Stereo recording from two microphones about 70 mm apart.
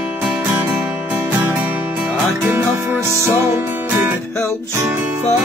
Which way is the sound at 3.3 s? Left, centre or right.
Right.